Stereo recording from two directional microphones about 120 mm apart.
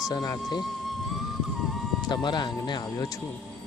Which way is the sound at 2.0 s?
40° left (ahead or behind).